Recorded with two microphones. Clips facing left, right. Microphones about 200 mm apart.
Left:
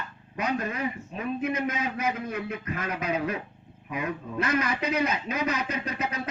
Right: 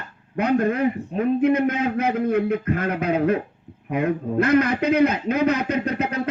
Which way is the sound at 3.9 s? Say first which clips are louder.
Right 10 dB; 55° right (ahead or behind).